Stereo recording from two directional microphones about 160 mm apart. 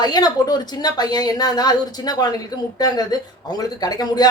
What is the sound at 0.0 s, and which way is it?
A woman's voice, 25° left (ahead or behind).